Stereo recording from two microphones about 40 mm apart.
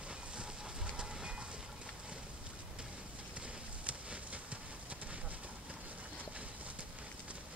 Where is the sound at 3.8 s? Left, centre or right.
Right.